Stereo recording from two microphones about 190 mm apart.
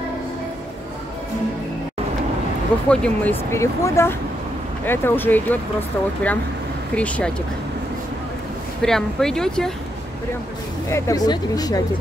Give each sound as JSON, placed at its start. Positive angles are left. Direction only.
{"t": 2.9, "sound": "speech", "side_deg": 5}
{"t": 8.8, "sound": "speech", "side_deg": 5}
{"t": 10.9, "sound": "speech", "side_deg": 15}